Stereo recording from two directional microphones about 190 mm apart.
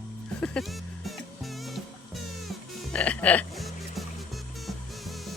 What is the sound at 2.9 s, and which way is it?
Music, 5° left (ahead or behind).